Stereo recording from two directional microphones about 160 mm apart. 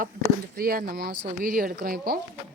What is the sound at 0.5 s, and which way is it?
Speech, 65° right (ahead or behind).